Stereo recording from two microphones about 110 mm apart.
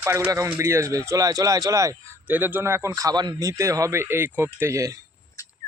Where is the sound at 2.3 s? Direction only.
15° right (ahead or behind).